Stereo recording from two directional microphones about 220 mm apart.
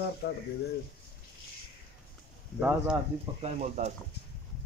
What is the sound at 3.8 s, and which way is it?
Speech, 35° right (ahead or behind).